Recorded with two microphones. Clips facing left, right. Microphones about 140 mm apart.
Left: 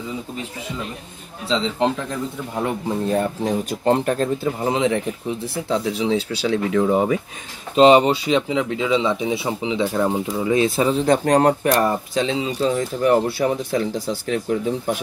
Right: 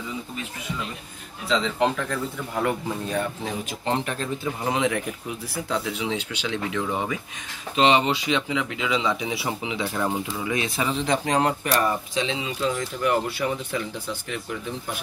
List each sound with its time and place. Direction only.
1.5 s speech: 25° left (ahead or behind)
3.2 s speech: 40° left (ahead or behind)
4.6 s speech: 30° left (ahead or behind)
10.3 s speech: 30° left (ahead or behind)
14.3 s speech: 55° left (ahead or behind)